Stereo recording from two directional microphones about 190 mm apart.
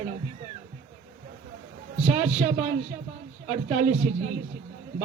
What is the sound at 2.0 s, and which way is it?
A man's voice, 35° right (ahead or behind).